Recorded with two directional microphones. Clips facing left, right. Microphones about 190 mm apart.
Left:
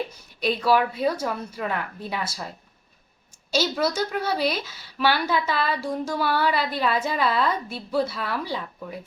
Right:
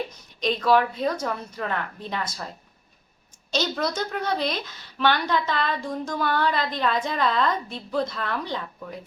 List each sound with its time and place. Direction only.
0.3 s a woman's voice: 10° left (ahead or behind)
3.5 s a woman's voice: 5° left (ahead or behind)